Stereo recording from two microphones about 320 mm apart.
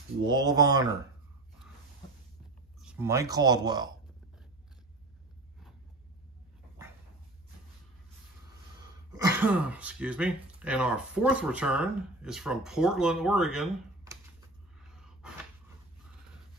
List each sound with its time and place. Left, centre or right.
0.3 s speech: centre
2.8 s speech: centre
9.1 s speech: centre
14.8 s a sound: centre